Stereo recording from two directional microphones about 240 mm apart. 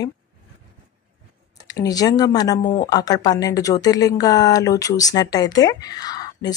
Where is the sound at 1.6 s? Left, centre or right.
Centre.